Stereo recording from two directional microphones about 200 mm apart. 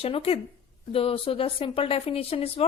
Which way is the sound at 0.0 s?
30° left (ahead or behind).